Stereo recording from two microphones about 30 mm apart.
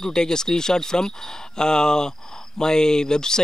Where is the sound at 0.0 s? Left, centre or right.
Left.